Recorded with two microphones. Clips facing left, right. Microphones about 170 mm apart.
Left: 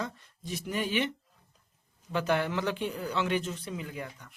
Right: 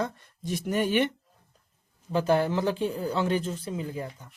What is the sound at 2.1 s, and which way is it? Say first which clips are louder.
Speech: right 5 dB; 35° right (ahead or behind).